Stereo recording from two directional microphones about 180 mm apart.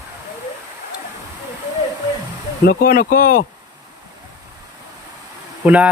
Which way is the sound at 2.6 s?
60° left (ahead or behind).